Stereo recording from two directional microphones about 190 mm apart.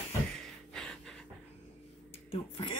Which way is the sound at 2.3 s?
30° left (ahead or behind).